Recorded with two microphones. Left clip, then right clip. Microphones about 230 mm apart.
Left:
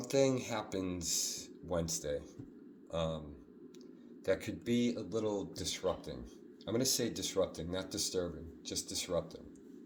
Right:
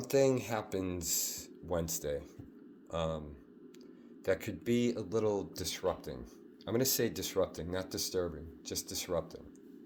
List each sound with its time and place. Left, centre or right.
0.0 s speech: right
4.3 s speech: right